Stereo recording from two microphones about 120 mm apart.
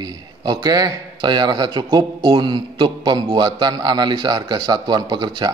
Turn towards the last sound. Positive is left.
turn(degrees=-35)  # may be behind; listen again after turning